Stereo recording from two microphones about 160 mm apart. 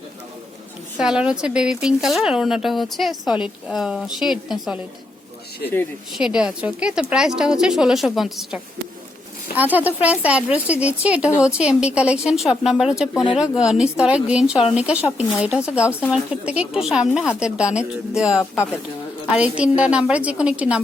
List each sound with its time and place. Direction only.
0.9 s speech: 5° right (ahead or behind)
6.1 s a woman's voice: 5° right (ahead or behind)